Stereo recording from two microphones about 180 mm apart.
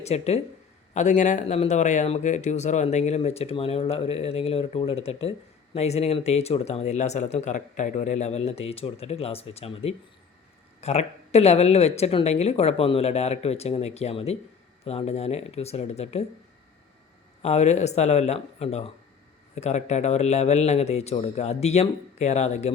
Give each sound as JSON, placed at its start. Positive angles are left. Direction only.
{"t": 0.0, "sound": "speech", "side_deg": 35}
{"t": 17.4, "sound": "speech", "side_deg": 40}